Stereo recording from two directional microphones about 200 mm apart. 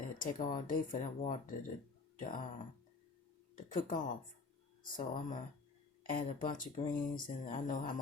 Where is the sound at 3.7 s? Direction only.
40° left (ahead or behind).